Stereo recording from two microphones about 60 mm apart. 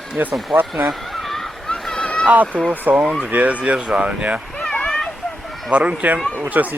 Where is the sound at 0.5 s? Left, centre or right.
Right.